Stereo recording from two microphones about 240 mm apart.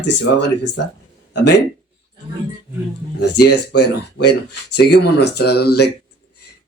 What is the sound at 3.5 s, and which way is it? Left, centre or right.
Speech, left.